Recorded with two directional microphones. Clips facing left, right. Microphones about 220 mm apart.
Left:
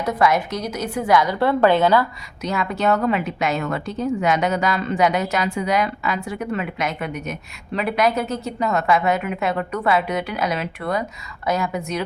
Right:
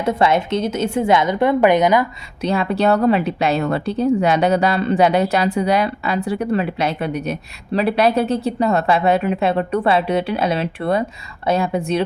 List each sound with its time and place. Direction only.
0.0 s a woman's voice: 25° right (ahead or behind)
2.4 s a woman's voice: 30° right (ahead or behind)